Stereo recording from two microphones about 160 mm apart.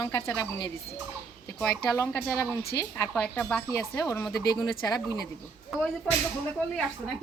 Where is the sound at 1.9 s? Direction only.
20° left (ahead or behind).